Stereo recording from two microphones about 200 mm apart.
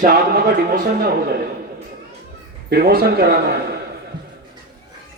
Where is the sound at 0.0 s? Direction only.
50° right (ahead or behind).